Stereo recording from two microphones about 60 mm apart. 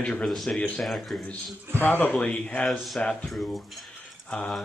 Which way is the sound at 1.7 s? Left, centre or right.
Left.